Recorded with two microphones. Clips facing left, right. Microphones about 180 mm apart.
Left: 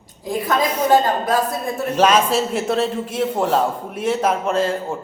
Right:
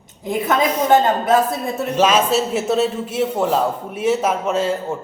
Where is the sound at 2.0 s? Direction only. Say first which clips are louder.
Even; 5° right (ahead or behind).